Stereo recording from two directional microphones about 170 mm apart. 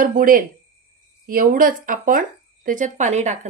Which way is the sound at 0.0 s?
55° right (ahead or behind).